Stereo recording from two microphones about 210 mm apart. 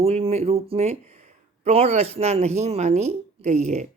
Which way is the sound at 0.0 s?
30° right (ahead or behind).